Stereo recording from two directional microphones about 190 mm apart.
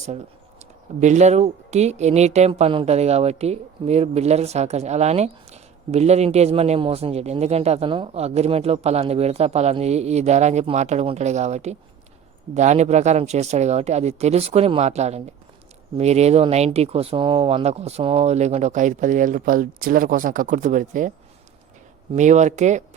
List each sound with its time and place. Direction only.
1.0 s speech: 35° right (ahead or behind)
22.1 s speech: 40° right (ahead or behind)